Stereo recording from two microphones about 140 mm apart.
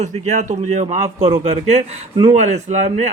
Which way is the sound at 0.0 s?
55° right (ahead or behind).